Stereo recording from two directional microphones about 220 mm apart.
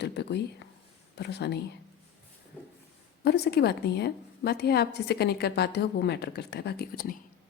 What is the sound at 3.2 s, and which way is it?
A woman's voice, 45° left (ahead or behind).